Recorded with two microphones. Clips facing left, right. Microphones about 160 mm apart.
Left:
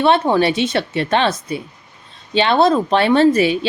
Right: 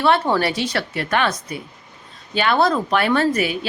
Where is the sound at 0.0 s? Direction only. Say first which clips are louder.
Left 4 dB; 20° left (ahead or behind).